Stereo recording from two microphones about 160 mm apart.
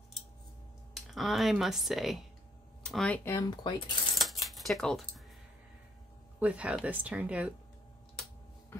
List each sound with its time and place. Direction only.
0.9 s speech: centre (ahead or behind)
3.3 s speech: 25° left (ahead or behind)
4.1 s a sound: centre (ahead or behind)
6.4 s speech: 10° right (ahead or behind)